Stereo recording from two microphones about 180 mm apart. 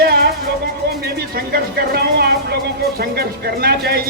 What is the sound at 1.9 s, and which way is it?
Music, 60° right (ahead or behind).